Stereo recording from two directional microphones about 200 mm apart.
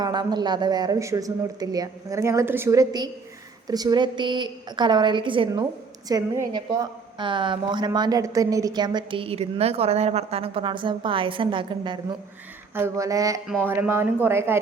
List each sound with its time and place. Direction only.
0.0 s a woman's voice: 20° right (ahead or behind)
12.7 s speech: 15° right (ahead or behind)